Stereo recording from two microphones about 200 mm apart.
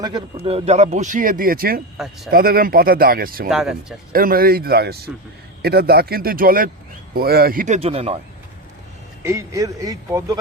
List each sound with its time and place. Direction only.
0.0 s speech: 25° right (ahead or behind); by 3.5 s 45° right (ahead or behind)
3.5 s speech: centre (ahead or behind)
4.1 s speech: 45° right (ahead or behind); by 8.2 s 30° right (ahead or behind)
9.2 s speech: 15° right (ahead or behind)